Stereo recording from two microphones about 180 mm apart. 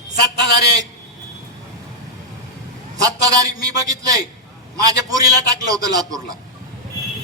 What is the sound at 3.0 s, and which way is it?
A man's voice, 20° right (ahead or behind).